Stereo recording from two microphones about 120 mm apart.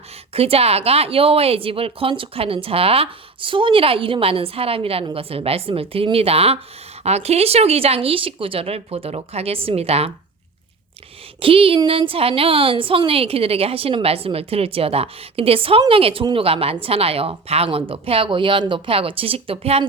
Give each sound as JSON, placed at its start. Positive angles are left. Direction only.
{"t": 0.3, "sound": "a woman's voice", "side_deg": -55}
{"t": 11.3, "sound": "a woman's voice", "side_deg": -50}